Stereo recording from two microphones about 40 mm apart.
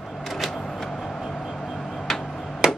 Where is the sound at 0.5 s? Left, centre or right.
Centre.